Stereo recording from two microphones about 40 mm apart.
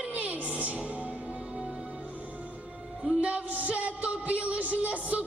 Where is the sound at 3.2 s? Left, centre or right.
Right.